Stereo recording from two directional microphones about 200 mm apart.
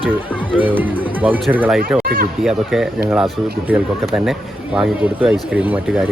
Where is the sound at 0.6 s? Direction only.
10° right (ahead or behind).